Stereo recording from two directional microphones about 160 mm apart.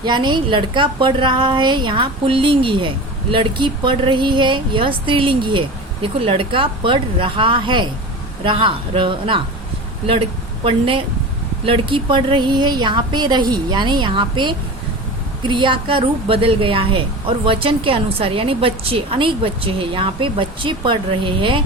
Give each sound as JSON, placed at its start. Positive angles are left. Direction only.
{"t": 0.0, "sound": "a woman's voice", "side_deg": -30}